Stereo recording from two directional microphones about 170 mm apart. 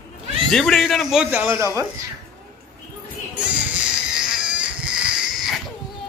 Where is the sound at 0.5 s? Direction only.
Centre (ahead or behind); by 1.9 s 15° right (ahead or behind).